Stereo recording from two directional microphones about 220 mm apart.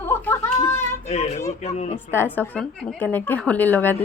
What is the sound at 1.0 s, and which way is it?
Speech, 30° left (ahead or behind).